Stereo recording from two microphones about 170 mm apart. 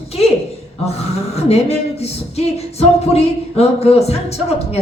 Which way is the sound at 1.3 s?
40° left (ahead or behind).